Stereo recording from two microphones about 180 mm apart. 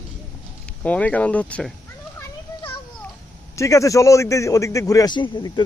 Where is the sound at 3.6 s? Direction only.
20° left (ahead or behind).